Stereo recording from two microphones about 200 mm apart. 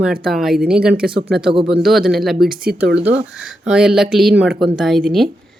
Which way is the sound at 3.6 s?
5° right (ahead or behind).